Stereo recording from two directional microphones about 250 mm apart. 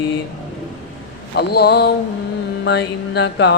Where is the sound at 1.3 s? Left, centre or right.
Left.